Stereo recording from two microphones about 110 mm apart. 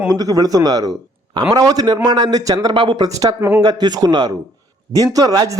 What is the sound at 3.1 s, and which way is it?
Speech, 30° right (ahead or behind).